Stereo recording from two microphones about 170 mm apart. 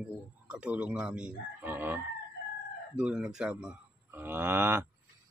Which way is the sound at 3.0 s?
5° right (ahead or behind).